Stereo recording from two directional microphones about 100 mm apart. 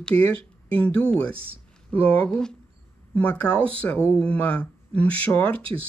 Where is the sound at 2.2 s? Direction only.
5° left (ahead or behind).